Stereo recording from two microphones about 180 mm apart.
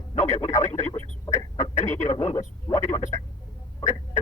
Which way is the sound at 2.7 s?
20° left (ahead or behind).